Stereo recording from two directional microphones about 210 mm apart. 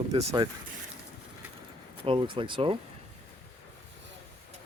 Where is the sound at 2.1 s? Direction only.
25° right (ahead or behind).